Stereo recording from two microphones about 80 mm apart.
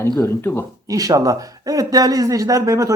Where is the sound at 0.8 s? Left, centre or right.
Right.